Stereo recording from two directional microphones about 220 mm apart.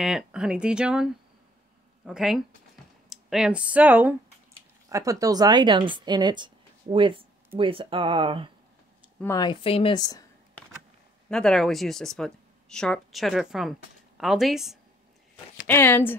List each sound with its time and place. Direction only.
0.0 s a woman's voice: 5° right (ahead or behind); by 8.5 s 20° right (ahead or behind)
9.2 s a woman's voice: 15° left (ahead or behind)
11.2 s speech: centre (ahead or behind)
15.6 s speech: 10° left (ahead or behind)